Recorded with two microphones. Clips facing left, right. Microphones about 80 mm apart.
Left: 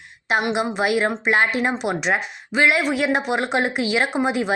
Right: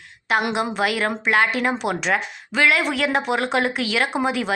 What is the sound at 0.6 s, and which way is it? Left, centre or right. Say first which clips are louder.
A woman's voice: left 2 dB; centre.